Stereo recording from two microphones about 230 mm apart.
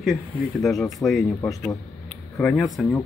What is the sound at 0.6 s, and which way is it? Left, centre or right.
Speech, centre.